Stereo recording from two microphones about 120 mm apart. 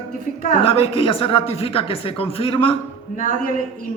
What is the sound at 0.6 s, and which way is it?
A man's voice, 55° left (ahead or behind).